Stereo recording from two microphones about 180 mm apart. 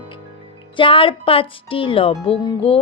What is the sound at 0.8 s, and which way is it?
Speech, 30° left (ahead or behind).